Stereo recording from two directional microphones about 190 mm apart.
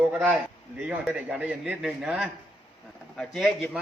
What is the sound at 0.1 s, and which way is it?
A man's voice, 10° right (ahead or behind).